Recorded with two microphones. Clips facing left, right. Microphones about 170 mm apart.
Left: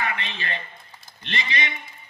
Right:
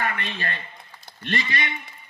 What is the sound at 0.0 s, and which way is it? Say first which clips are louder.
A man's voice: right 1 dB; 50° right (ahead or behind).